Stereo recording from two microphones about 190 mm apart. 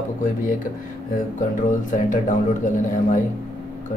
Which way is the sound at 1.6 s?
40° left (ahead or behind).